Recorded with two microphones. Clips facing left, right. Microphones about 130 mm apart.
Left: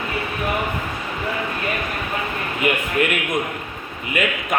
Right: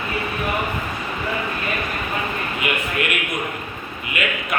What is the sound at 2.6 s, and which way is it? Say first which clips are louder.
A man's voice: left 6 dB; 40° left (ahead or behind).